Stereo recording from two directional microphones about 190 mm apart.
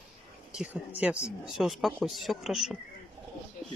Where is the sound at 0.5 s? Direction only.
10° right (ahead or behind).